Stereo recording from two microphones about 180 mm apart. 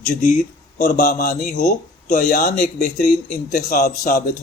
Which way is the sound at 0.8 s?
45° left (ahead or behind).